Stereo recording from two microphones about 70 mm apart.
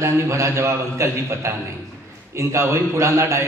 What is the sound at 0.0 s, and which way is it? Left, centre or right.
A man's voice, right.